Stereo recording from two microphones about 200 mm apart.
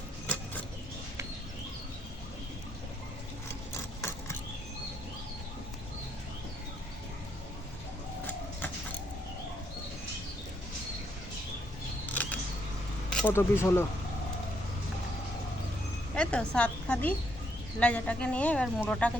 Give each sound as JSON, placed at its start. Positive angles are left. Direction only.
{"t": 12.0, "sound": "single-lens reflex camera", "side_deg": 10}
{"t": 13.1, "sound": "speech", "side_deg": 5}
{"t": 16.1, "sound": "a woman's voice", "side_deg": 5}